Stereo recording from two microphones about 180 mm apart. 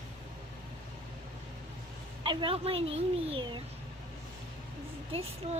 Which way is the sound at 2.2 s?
30° right (ahead or behind).